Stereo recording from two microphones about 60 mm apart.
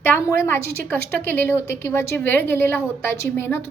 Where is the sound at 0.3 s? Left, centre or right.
Left.